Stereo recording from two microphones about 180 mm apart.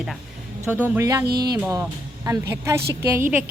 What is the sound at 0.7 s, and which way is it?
A woman's voice, 10° right (ahead or behind).